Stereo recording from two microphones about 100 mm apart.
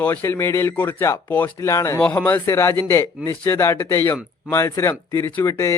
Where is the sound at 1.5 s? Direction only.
30° left (ahead or behind).